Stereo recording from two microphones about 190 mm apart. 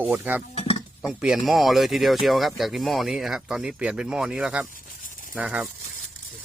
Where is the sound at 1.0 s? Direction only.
5° right (ahead or behind).